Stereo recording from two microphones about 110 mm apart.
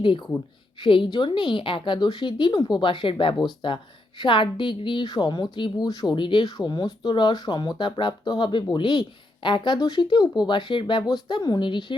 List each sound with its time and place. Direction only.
0.0 s a woman's voice: 50° left (ahead or behind)